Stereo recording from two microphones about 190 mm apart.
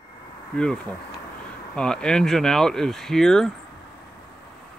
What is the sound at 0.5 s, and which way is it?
Speech, 5° left (ahead or behind).